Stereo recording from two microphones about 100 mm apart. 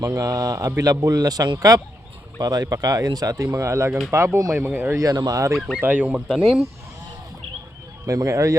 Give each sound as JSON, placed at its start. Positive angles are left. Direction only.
{"t": 0.0, "sound": "speech", "side_deg": -30}
{"t": 4.9, "sound": "speech", "side_deg": -40}
{"t": 5.5, "sound": "speech", "side_deg": -5}
{"t": 5.8, "sound": "speech", "side_deg": -15}
{"t": 8.0, "sound": "speech", "side_deg": -35}